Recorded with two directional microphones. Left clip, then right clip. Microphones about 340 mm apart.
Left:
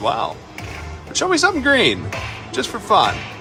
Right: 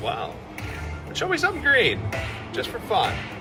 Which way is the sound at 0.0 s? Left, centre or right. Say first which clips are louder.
Left 8 dB; centre.